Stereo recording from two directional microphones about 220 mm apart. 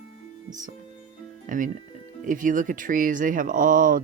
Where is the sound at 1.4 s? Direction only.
35° right (ahead or behind).